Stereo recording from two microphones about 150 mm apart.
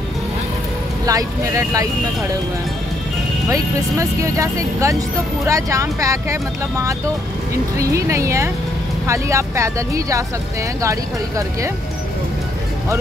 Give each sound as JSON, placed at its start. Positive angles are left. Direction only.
{"t": 1.0, "sound": "speech", "side_deg": -20}
{"t": 3.4, "sound": "speech", "side_deg": -20}